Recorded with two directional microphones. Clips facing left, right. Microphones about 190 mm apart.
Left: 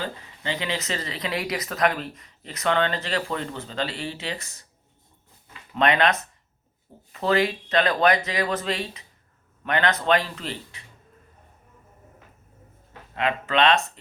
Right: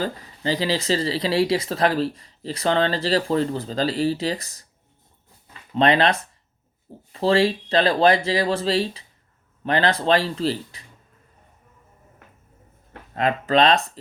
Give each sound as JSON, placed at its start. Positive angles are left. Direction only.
{"t": 0.0, "sound": "speech", "side_deg": -40}
{"t": 5.7, "sound": "speech", "side_deg": -30}
{"t": 13.1, "sound": "speech", "side_deg": -40}